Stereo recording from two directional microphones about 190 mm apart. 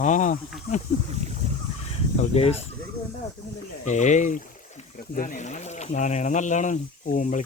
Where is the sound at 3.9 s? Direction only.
40° left (ahead or behind).